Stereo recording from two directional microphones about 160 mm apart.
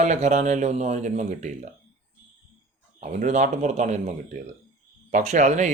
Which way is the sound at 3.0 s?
50° right (ahead or behind).